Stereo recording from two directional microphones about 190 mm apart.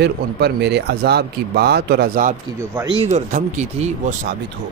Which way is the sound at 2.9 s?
35° right (ahead or behind).